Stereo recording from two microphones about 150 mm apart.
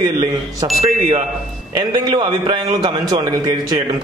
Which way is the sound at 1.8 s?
30° right (ahead or behind).